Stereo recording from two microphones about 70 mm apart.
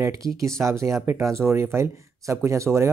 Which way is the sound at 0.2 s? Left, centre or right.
Right.